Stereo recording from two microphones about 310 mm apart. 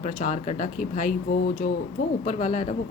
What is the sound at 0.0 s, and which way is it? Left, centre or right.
Speech, left.